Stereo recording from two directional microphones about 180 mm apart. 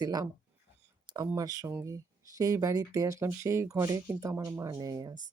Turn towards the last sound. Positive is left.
turn(degrees=-20)  # may be behind; listen again after turning